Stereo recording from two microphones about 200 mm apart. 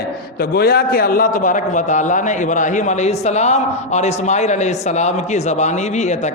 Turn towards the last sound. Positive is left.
turn(degrees=35)  # may be behind; listen again after turning